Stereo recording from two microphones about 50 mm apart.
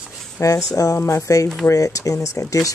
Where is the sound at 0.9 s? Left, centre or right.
Left.